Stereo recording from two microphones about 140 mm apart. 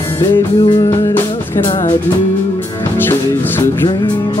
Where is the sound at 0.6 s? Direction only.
30° left (ahead or behind).